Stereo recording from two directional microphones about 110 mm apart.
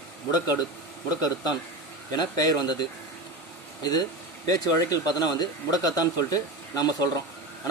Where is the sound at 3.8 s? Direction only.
40° left (ahead or behind).